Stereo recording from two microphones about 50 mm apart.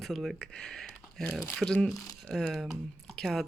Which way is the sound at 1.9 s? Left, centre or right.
Centre.